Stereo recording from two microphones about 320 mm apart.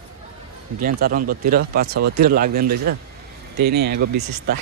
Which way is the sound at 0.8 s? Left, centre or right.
Right.